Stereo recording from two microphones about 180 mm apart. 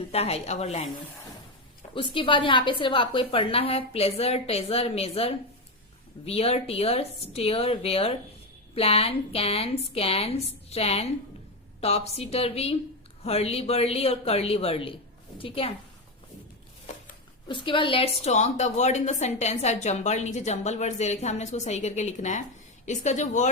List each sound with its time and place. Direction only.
0.1 s a woman's voice: 35° left (ahead or behind)
2.1 s a woman's voice: 30° left (ahead or behind)
17.5 s a woman's voice: 30° left (ahead or behind)